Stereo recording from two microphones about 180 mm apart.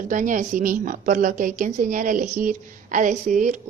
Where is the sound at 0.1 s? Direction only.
45° right (ahead or behind).